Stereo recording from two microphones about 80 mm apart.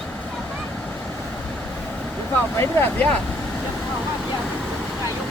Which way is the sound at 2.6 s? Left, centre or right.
Left.